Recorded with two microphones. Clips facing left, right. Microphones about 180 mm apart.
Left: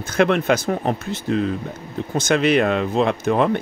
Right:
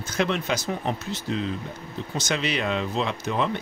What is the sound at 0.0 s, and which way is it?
Speech, 55° left (ahead or behind).